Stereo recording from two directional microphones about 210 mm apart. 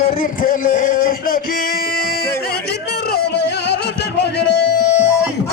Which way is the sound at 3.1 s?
55° left (ahead or behind).